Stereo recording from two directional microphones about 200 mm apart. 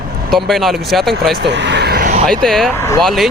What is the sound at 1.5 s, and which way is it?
Vehicle, 60° right (ahead or behind).